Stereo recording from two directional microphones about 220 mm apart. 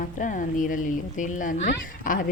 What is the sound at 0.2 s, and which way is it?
Speech, 35° left (ahead or behind).